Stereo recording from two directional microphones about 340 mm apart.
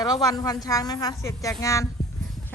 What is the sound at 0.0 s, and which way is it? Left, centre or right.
A woman's voice, centre.